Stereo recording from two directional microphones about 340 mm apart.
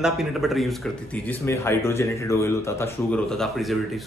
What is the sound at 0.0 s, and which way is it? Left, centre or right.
Speech, centre.